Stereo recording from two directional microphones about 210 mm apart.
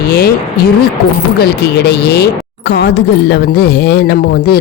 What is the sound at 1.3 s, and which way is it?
Speech, 50° left (ahead or behind).